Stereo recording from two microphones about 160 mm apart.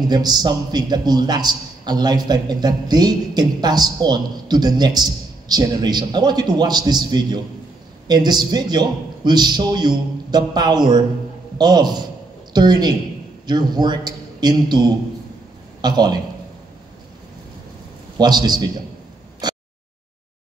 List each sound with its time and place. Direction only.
0.1 s a man's voice: 25° right (ahead or behind)
18.1 s a man's voice: 25° right (ahead or behind)
19.4 s a sound: 25° right (ahead or behind)